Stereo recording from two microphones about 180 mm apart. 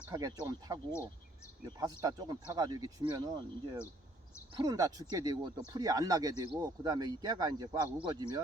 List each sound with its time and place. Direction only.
0.1 s speech: 20° right (ahead or behind)